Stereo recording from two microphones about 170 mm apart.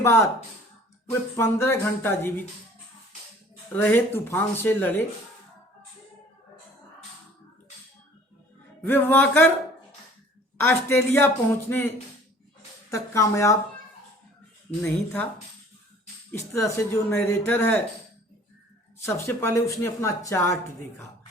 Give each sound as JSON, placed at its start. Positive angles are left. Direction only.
{"t": 0.0, "sound": "speech", "side_deg": 15}
{"t": 1.4, "sound": "speech", "side_deg": 15}
{"t": 3.8, "sound": "speech", "side_deg": 10}
{"t": 8.9, "sound": "speech", "side_deg": 10}
{"t": 10.6, "sound": "speech", "side_deg": 15}
{"t": 14.8, "sound": "speech", "side_deg": 10}
{"t": 16.3, "sound": "speech", "side_deg": 15}
{"t": 19.0, "sound": "speech", "side_deg": 15}